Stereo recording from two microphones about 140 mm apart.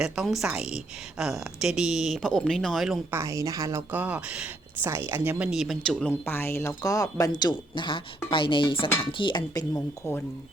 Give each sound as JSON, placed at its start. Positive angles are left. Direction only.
{"t": 0.0, "sound": "speech", "side_deg": 0}
{"t": 3.1, "sound": "a woman's voice", "side_deg": -20}
{"t": 5.5, "sound": "speech", "side_deg": 0}
{"t": 9.7, "sound": "speech", "side_deg": 15}